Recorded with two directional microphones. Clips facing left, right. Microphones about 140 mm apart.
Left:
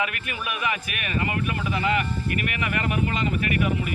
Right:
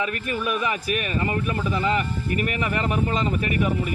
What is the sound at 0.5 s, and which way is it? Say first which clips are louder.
Speech: right 1 dB; 35° right (ahead or behind).